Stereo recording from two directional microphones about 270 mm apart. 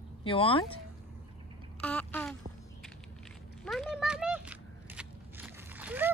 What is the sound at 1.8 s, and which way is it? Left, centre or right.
Speech, centre.